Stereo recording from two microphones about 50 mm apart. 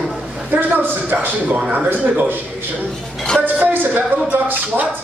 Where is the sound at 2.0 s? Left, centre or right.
Right.